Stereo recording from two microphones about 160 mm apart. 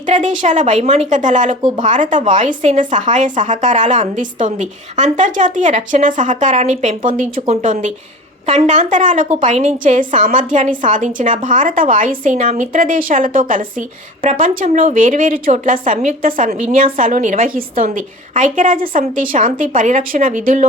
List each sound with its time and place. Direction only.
0.0 s a woman's voice: 50° right (ahead or behind)